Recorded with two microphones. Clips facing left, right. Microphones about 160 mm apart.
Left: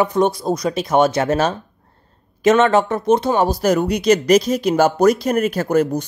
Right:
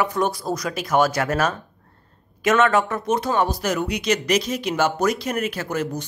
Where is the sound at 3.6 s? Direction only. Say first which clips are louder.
Left 7 dB; 40° left (ahead or behind).